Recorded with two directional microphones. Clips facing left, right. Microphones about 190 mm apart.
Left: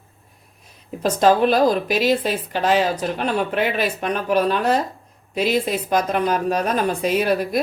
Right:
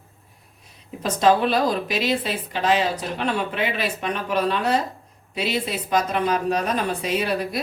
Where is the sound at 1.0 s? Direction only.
45° left (ahead or behind).